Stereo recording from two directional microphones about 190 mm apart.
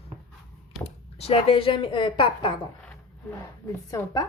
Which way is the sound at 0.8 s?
30° left (ahead or behind).